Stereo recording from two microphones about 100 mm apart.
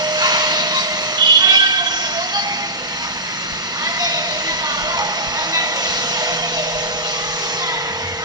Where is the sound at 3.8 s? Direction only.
40° right (ahead or behind).